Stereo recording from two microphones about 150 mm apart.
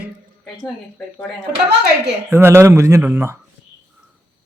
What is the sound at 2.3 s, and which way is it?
Speech, 15° right (ahead or behind).